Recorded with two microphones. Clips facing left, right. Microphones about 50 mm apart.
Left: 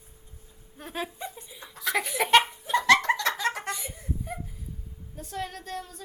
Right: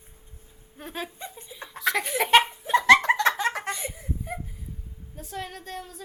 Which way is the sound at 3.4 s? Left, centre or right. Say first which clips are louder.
Right 1 dB; centre.